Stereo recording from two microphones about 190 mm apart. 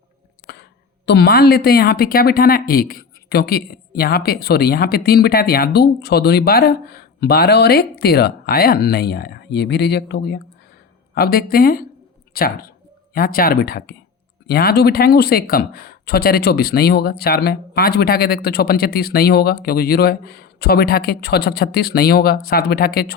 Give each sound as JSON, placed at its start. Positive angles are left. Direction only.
{"t": 0.4, "sound": "a woman's voice", "side_deg": 60}